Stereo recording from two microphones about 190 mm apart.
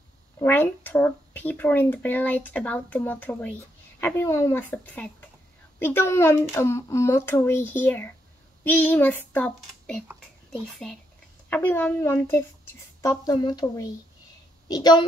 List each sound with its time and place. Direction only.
0.4 s speech: 10° left (ahead or behind)